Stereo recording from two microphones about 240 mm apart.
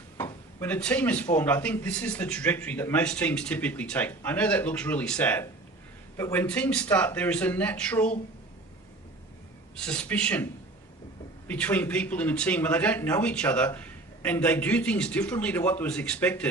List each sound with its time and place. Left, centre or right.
0.2 s a man's voice: centre
9.7 s a man's voice: centre